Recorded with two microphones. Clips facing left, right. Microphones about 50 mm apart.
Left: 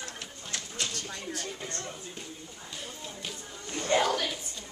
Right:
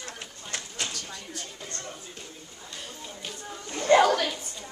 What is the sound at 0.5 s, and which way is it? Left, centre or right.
Bird, centre.